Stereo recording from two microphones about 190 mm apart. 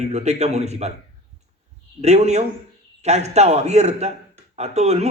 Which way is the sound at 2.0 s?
35° right (ahead or behind).